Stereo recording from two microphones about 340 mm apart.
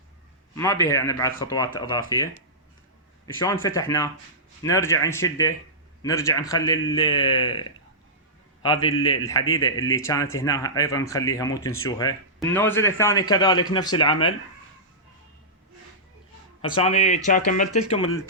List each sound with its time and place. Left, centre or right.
0.5 s speech: centre
3.4 s speech: centre
16.6 s speech: centre